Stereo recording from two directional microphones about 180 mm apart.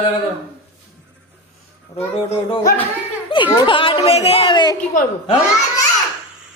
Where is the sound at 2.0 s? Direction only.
35° left (ahead or behind).